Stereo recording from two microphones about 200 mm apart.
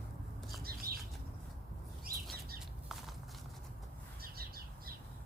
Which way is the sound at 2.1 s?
50° right (ahead or behind).